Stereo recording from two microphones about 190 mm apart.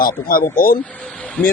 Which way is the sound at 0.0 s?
50° left (ahead or behind).